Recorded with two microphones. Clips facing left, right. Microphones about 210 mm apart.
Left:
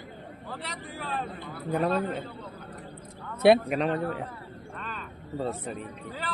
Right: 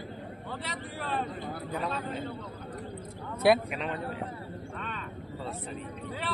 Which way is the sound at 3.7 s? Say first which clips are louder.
Left 8 dB; 40° left (ahead or behind).